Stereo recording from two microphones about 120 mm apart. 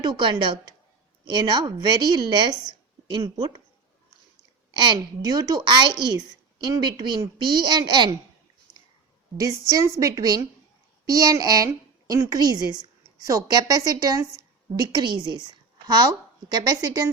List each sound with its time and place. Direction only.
0.0 s a woman's voice: 40° right (ahead or behind)
4.7 s a woman's voice: 40° right (ahead or behind)
9.4 s a woman's voice: 30° right (ahead or behind)